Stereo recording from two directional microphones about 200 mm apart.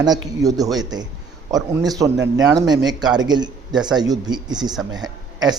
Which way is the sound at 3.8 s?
20° right (ahead or behind).